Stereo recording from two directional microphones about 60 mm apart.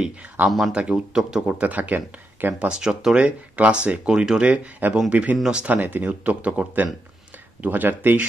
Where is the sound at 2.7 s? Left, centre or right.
Centre.